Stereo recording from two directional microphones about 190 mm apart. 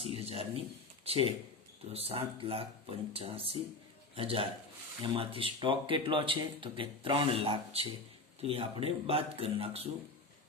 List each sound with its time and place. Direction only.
0.0 s a man's voice: 30° right (ahead or behind)